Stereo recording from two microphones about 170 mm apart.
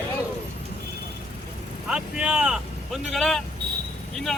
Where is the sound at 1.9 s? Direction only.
5° right (ahead or behind).